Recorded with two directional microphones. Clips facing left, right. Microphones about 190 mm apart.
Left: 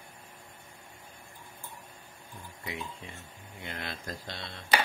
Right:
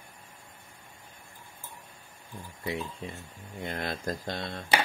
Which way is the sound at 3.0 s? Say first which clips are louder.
Right 6 dB; 35° right (ahead or behind).